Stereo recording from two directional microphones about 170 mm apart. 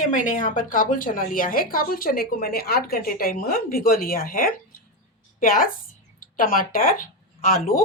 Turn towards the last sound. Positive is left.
turn(degrees=55)  # may be behind; listen again after turning